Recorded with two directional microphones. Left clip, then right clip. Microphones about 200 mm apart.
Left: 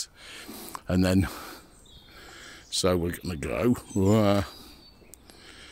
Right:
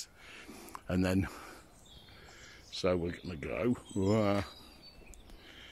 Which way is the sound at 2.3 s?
60° left (ahead or behind).